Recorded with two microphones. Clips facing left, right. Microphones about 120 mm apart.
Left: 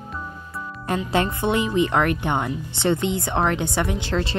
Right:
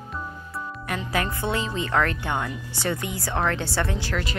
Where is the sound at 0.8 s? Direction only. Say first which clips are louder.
Left 6 dB; 30° left (ahead or behind).